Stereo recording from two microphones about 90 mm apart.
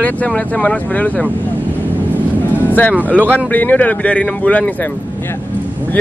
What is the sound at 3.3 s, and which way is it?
Speech, 20° left (ahead or behind).